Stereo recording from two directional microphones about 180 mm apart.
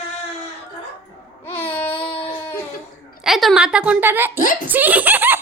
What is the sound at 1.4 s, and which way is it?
Babbling, 10° left (ahead or behind).